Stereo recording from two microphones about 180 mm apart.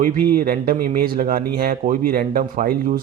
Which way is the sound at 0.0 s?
50° right (ahead or behind).